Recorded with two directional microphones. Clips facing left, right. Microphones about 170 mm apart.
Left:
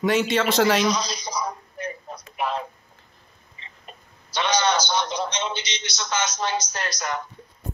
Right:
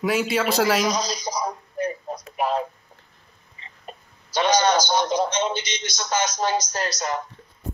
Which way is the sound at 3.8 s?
40° right (ahead or behind).